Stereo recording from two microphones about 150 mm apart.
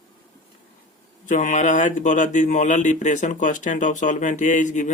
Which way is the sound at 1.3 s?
60° left (ahead or behind).